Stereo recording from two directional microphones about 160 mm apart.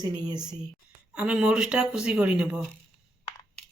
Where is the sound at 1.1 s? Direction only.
5° right (ahead or behind).